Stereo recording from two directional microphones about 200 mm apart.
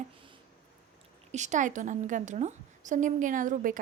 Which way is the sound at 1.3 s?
35° right (ahead or behind).